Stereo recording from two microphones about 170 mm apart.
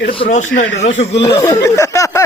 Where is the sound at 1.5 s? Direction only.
20° left (ahead or behind).